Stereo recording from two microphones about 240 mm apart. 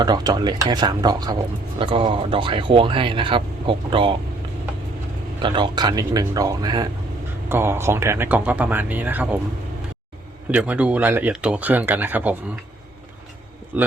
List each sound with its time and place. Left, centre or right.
0.0 s speech: centre
5.4 s speech: centre
10.5 s speech: centre
13.7 s a man's voice: centre